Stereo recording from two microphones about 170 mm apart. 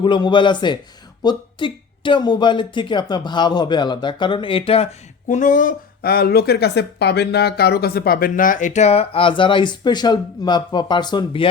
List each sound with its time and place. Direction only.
0.0 s speech: 30° left (ahead or behind)